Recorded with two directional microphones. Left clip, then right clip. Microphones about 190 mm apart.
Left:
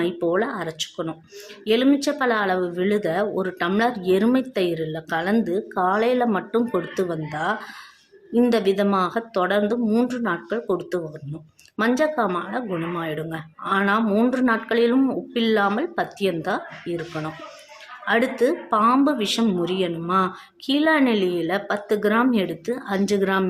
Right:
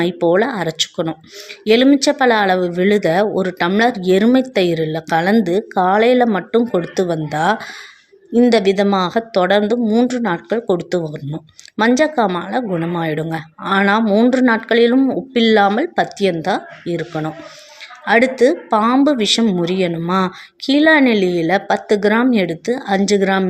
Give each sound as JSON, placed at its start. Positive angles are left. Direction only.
{"t": 0.0, "sound": "speech", "side_deg": -30}
{"t": 14.0, "sound": "speech", "side_deg": -20}
{"t": 18.8, "sound": "speech", "side_deg": -15}
{"t": 19.0, "sound": "speech", "side_deg": -25}